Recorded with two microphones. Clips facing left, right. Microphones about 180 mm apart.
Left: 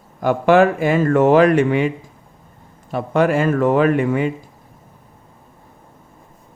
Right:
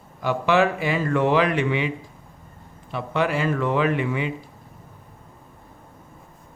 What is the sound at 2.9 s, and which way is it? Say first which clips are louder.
Speech: left 7 dB; 45° left (ahead or behind).